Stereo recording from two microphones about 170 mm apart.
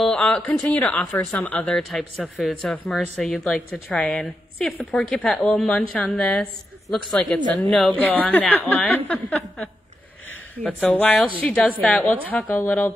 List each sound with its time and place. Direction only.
0.0 s speech: 5° left (ahead or behind)